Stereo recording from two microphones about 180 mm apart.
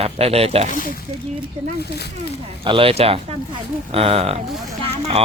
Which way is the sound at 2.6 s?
30° right (ahead or behind).